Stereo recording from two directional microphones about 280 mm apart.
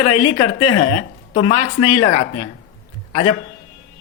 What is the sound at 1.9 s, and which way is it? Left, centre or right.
Speech, left.